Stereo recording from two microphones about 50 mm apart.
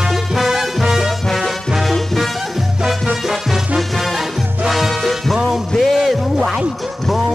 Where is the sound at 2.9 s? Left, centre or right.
Centre.